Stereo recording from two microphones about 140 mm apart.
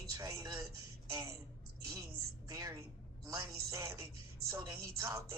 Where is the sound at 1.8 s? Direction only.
25° right (ahead or behind).